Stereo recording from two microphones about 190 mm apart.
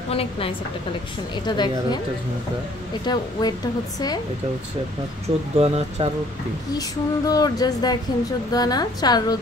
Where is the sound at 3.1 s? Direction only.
20° left (ahead or behind).